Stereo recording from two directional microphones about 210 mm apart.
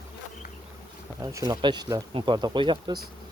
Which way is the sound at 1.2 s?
15° right (ahead or behind).